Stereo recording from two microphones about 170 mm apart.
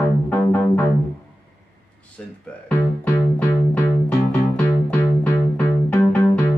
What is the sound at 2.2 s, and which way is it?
Music, 5° left (ahead or behind).